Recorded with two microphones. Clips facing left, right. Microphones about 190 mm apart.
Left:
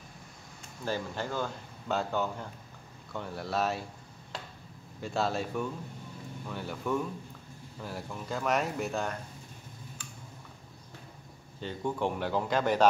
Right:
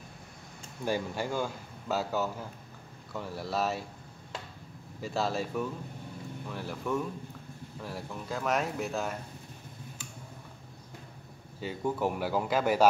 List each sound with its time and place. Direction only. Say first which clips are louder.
0.8 s speech: right 2 dB; 15° right (ahead or behind)
5.0 s speech: even; centre (ahead or behind)
11.6 s speech: right 1 dB; 5° right (ahead or behind)